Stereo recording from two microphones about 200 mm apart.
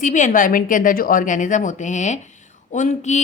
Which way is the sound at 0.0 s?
40° left (ahead or behind).